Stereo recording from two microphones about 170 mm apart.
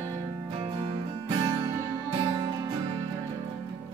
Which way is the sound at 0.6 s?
30° right (ahead or behind).